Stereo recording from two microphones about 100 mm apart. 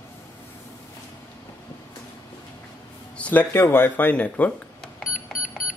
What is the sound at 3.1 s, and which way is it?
Speech, 15° left (ahead or behind).